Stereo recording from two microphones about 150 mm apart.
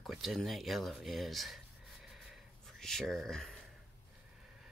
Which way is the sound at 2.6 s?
5° left (ahead or behind).